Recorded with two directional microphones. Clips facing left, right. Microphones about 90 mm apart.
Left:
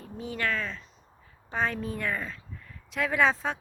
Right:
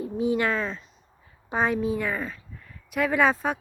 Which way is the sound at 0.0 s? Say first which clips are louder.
Right 8 dB; 15° right (ahead or behind).